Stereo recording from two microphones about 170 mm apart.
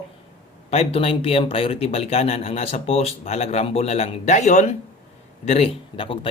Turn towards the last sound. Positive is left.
turn(degrees=30)  # may be behind; listen again after turning